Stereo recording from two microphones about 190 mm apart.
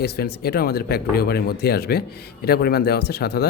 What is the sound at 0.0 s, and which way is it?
Speech, 55° left (ahead or behind).